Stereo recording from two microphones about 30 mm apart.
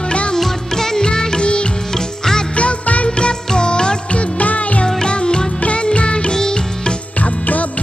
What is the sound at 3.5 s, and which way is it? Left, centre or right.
Music, left.